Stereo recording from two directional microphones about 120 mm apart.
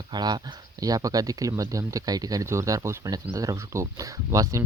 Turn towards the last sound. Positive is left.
turn(degrees=-25)  # may be behind; listen again after turning